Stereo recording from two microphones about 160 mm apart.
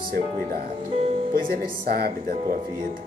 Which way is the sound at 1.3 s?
60° right (ahead or behind).